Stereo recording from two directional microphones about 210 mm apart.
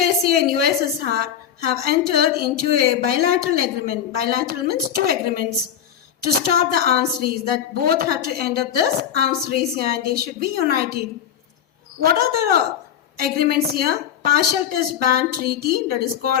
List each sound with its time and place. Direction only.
0.0 s a woman's voice: 45° right (ahead or behind)
1.8 s a woman's voice: 45° right (ahead or behind)